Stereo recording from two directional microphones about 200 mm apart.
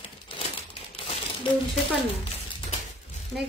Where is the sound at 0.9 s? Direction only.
30° left (ahead or behind).